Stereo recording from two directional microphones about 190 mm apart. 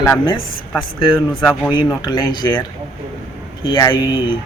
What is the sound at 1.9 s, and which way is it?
Speech, 20° left (ahead or behind).